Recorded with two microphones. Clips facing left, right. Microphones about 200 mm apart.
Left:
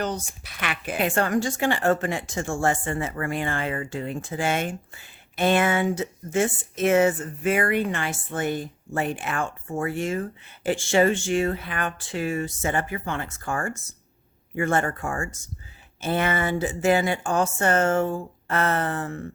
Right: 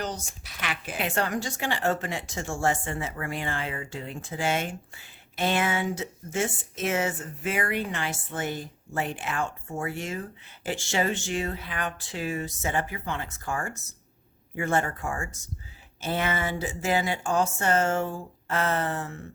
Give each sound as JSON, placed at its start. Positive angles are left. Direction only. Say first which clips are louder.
{"t": 0.0, "sound": "speech", "louder": "left 5 dB", "side_deg": 60}